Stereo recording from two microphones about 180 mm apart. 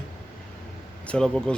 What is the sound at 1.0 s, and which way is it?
Speech, 5° left (ahead or behind).